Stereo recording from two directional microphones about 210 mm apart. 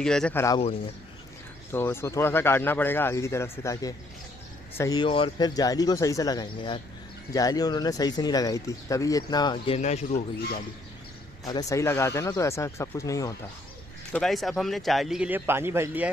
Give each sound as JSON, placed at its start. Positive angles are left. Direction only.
{"t": 0.0, "sound": "speech", "side_deg": 5}
{"t": 1.7, "sound": "speech", "side_deg": 10}
{"t": 9.8, "sound": "a man's voice", "side_deg": 30}
{"t": 11.4, "sound": "speech", "side_deg": 15}
{"t": 14.1, "sound": "a man's voice", "side_deg": 0}